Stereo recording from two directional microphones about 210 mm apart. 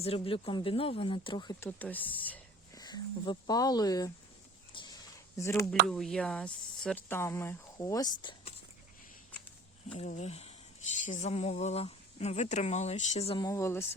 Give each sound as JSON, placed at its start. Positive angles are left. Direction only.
{"t": 0.0, "sound": "speech", "side_deg": 30}
{"t": 1.8, "sound": "whispering", "side_deg": 10}
{"t": 2.8, "sound": "speech", "side_deg": 20}
{"t": 4.7, "sound": "a sound", "side_deg": 20}
{"t": 5.9, "sound": "speech", "side_deg": 5}
{"t": 10.0, "sound": "speech", "side_deg": 30}
{"t": 13.4, "sound": "speech", "side_deg": 15}